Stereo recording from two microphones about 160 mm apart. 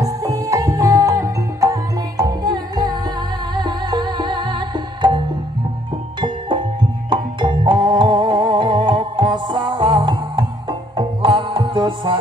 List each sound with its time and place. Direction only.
0.0 s music: 20° right (ahead or behind)
7.1 s music: 30° right (ahead or behind)